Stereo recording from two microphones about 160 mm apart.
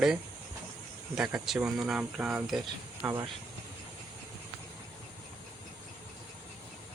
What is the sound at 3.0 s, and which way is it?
Speech, 15° right (ahead or behind).